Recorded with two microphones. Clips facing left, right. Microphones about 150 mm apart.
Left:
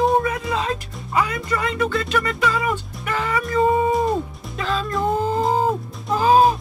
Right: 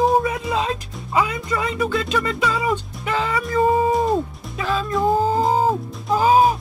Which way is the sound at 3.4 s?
Centre (ahead or behind).